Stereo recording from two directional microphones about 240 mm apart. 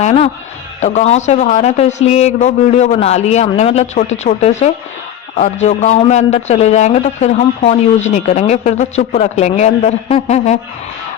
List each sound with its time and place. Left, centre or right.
0.0 s a man's voice: left